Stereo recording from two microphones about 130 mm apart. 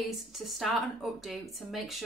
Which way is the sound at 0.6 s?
Centre (ahead or behind).